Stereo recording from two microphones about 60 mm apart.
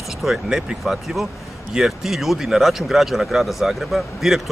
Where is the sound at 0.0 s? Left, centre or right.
Centre.